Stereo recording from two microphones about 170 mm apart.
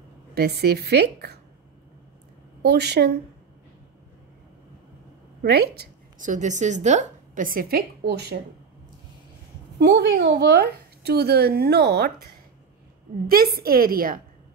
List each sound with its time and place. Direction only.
0.3 s speech: 70° right (ahead or behind)
2.6 s speech: 75° right (ahead or behind)
5.4 s speech: 70° right (ahead or behind)
6.1 s a woman's voice: 45° right (ahead or behind); by 8.4 s 75° right (ahead or behind)
9.8 s speech: 75° right (ahead or behind)
13.3 s a woman's voice: 60° right (ahead or behind)